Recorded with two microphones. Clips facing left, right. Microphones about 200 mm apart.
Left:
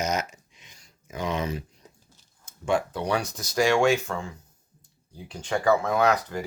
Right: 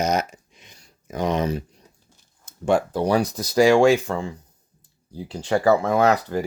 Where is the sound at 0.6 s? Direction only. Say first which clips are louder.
Right 4 dB; 40° right (ahead or behind).